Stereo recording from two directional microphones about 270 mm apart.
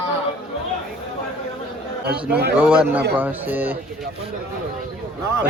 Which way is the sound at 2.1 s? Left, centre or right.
Centre.